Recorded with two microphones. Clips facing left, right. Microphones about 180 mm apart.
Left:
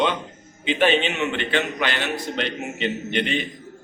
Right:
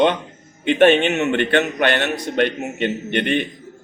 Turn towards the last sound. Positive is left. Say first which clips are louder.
# right 4 dB
turn(degrees=-55)  # may be behind; listen again after turning